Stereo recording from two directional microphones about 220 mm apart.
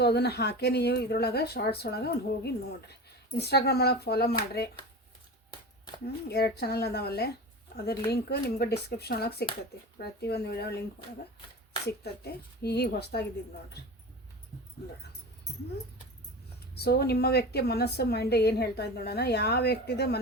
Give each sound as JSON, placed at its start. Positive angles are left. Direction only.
{"t": 0.0, "sound": "a woman's voice", "side_deg": 45}
{"t": 6.2, "sound": "a woman's voice", "side_deg": 45}
{"t": 11.9, "sound": "a woman's voice", "side_deg": 50}
{"t": 16.7, "sound": "a woman's voice", "side_deg": 45}